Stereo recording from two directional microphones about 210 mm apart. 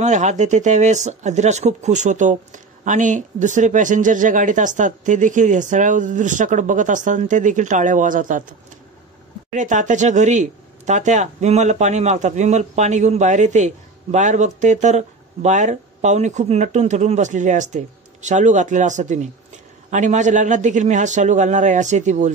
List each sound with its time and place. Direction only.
0.0 s speech: 35° right (ahead or behind)
9.5 s speech: 35° right (ahead or behind)